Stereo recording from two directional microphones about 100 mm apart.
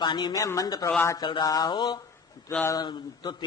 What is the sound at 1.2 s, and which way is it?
A man's voice, 50° left (ahead or behind).